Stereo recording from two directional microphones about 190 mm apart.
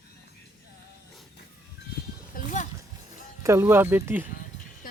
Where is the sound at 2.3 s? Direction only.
40° left (ahead or behind).